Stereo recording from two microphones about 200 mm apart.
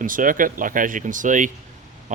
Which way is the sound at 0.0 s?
40° right (ahead or behind).